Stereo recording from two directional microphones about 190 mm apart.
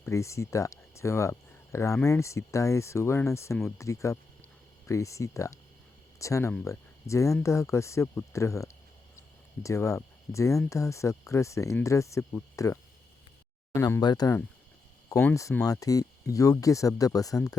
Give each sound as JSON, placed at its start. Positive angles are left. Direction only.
{"t": 0.0, "sound": "speech", "side_deg": 15}